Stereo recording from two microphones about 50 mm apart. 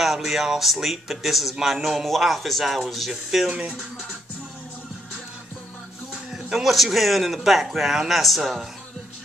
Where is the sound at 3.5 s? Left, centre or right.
Centre.